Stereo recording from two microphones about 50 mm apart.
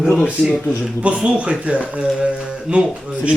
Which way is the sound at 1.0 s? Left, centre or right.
Centre.